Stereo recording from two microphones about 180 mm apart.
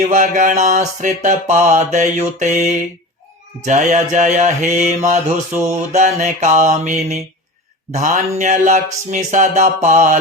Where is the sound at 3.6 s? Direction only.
40° right (ahead or behind).